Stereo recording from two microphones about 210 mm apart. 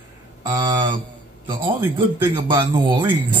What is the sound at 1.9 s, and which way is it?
Mantra, 20° right (ahead or behind).